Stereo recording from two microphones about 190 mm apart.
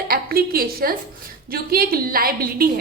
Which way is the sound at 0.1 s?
50° right (ahead or behind).